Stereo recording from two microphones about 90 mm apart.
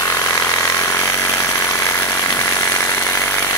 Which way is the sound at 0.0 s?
35° left (ahead or behind).